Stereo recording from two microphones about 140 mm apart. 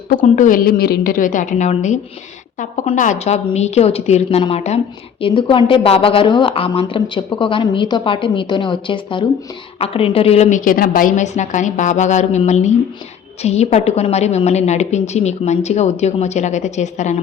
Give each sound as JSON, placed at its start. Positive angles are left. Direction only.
{"t": 0.1, "sound": "a woman's voice", "side_deg": 65}
{"t": 5.2, "sound": "a woman's voice", "side_deg": 35}